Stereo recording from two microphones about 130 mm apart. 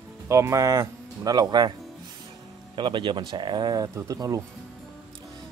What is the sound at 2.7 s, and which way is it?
Speech, 40° right (ahead or behind).